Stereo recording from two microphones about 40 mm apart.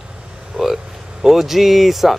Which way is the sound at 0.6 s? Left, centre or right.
Centre.